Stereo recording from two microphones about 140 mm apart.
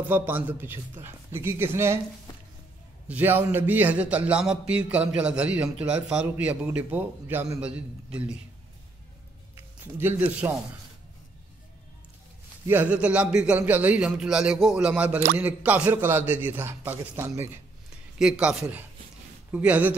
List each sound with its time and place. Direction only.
0.0 s a man's voice: 15° right (ahead or behind)
3.1 s a man's voice: 15° right (ahead or behind)
9.6 s a sound: 15° right (ahead or behind)
12.6 s a man's voice: 10° right (ahead or behind)
18.1 s a man's voice: 5° right (ahead or behind)